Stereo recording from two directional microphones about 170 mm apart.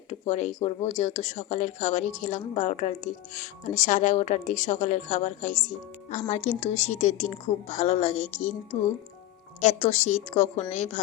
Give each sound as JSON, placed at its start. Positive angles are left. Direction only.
{"t": 0.1, "sound": "a woman's voice", "side_deg": 45}